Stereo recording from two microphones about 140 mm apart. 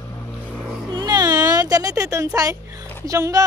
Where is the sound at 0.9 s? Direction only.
30° right (ahead or behind).